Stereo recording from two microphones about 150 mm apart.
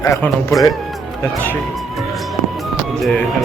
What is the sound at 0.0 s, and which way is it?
Speech, 20° left (ahead or behind).